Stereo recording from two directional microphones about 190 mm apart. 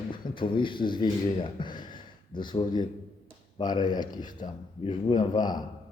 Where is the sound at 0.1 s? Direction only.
25° left (ahead or behind).